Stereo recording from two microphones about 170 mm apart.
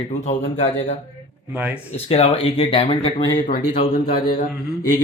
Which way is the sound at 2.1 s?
35° left (ahead or behind).